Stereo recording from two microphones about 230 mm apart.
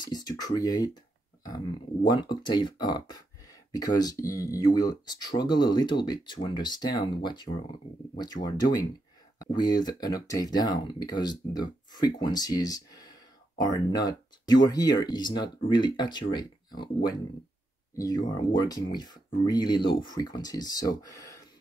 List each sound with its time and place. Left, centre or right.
0.0 s speech: centre
2.0 s speech: centre
18.3 s speech: centre